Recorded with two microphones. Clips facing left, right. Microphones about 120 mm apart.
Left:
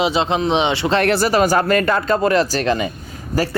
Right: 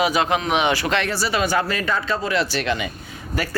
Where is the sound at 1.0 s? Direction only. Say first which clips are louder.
Left 8 dB; 55° left (ahead or behind).